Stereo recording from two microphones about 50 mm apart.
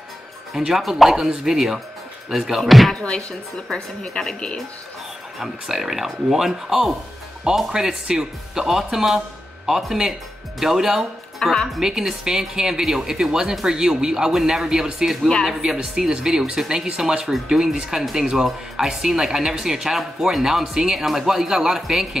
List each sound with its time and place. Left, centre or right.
0.5 s speech: centre
3.0 s speech: centre
5.4 s speech: centre
11.3 s speech: centre
11.8 s speech: centre
17.3 s speech: centre